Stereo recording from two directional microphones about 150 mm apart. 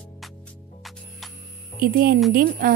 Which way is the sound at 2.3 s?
75° right (ahead or behind).